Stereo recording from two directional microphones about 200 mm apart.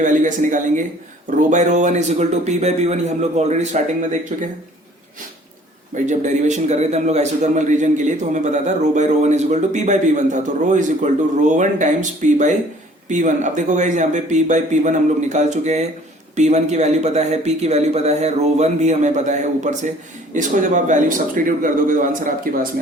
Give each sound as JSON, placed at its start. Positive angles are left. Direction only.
{"t": 0.0, "sound": "a man's voice", "side_deg": -40}
{"t": 5.9, "sound": "a man's voice", "side_deg": -35}